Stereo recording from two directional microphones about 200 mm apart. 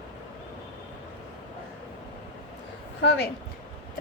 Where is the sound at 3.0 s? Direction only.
60° left (ahead or behind).